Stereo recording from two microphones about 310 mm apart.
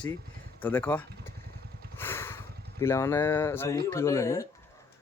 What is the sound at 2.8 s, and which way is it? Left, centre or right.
Speech, centre.